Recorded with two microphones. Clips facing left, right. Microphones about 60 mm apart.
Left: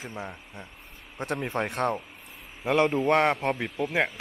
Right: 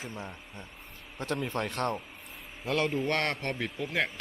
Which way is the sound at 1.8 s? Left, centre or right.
Centre.